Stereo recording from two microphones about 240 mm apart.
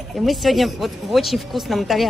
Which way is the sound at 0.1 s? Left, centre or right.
Centre.